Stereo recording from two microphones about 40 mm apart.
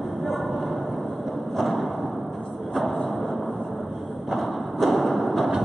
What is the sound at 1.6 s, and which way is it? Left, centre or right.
Thump, centre.